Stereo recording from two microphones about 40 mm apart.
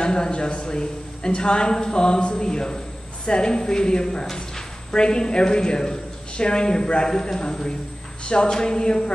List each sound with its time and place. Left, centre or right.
0.0 s a woman's voice: left